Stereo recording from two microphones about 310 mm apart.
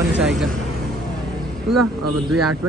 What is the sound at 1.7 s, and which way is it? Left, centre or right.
Speech, right.